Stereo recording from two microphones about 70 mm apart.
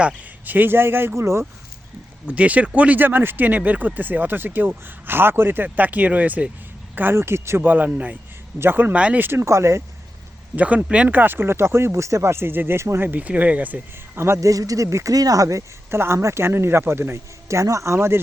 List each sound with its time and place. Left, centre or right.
0.0 s speech: right
2.2 s speech: centre; by 7.7 s right
7.7 s speech: right
8.5 s speech: right
9.0 s speech: centre
9.2 s speech: right
10.5 s speech: right
11.2 s speech: right
13.1 s speech: right
14.4 s speech: right